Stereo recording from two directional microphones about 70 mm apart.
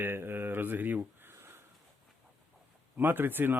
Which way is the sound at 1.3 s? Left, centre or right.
Right.